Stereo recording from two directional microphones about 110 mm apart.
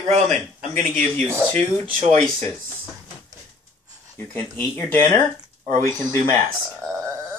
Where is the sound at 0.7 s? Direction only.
15° left (ahead or behind).